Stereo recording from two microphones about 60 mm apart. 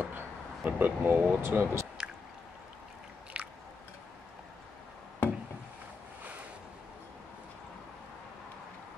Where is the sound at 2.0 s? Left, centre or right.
Centre.